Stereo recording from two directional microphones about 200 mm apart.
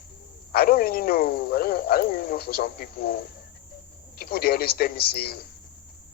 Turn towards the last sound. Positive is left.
turn(degrees=50)  # may be behind; listen again after turning